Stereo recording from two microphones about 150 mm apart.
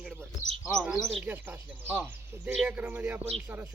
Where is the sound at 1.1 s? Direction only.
10° right (ahead or behind).